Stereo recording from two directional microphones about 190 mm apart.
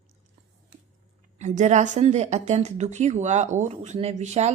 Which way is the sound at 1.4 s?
40° right (ahead or behind).